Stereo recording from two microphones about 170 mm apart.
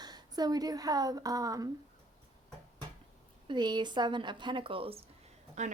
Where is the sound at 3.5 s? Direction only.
25° right (ahead or behind).